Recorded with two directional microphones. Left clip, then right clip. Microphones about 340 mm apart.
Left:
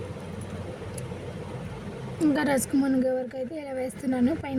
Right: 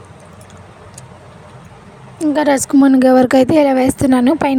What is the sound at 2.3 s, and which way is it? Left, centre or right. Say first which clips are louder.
A woman's voice: right 14 dB; right.